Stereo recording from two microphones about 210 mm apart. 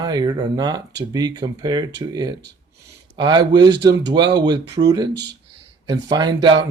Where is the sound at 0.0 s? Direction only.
20° right (ahead or behind).